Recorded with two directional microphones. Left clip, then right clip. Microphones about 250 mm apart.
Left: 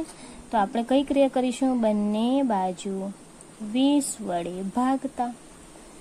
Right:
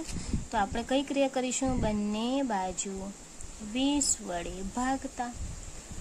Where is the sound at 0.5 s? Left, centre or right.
Centre.